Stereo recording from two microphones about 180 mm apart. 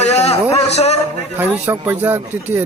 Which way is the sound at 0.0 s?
40° left (ahead or behind).